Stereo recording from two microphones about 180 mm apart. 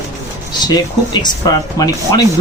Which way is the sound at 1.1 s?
20° left (ahead or behind).